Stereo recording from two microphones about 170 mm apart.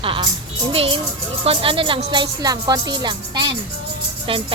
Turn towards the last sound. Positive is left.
turn(degrees=-30)  # may be behind; listen again after turning